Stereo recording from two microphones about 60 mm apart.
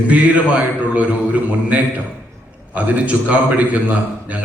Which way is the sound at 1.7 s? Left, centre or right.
Right.